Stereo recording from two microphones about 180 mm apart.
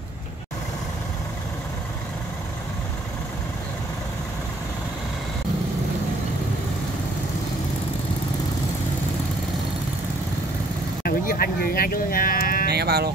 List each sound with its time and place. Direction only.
11.1 s speech: 55° left (ahead or behind)
12.6 s speech: 65° right (ahead or behind)